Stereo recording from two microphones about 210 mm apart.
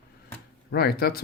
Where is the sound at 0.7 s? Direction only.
45° left (ahead or behind).